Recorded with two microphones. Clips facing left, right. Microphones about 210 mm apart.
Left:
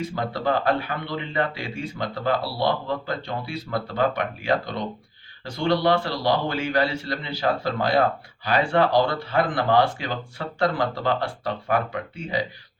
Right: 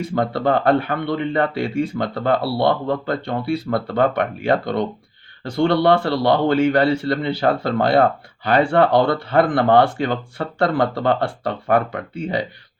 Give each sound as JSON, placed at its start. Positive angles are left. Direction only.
{"t": 0.1, "sound": "a man's voice", "side_deg": -55}